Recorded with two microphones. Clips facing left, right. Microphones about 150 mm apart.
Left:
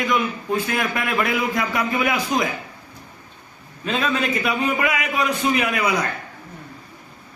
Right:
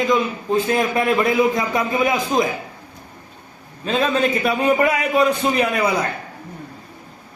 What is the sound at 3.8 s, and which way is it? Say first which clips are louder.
A man's voice: right 4 dB; 30° right (ahead or behind).